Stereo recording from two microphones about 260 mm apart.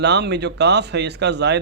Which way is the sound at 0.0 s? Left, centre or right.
Right.